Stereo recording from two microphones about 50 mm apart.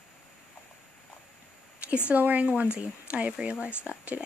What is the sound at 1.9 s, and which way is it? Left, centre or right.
Speech, right.